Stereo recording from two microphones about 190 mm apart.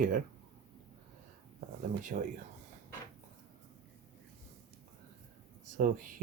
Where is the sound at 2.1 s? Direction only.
45° right (ahead or behind).